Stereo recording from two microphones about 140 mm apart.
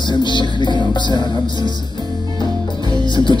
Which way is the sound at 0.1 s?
35° left (ahead or behind).